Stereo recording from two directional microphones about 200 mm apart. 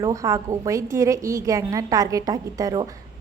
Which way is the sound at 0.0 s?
15° right (ahead or behind).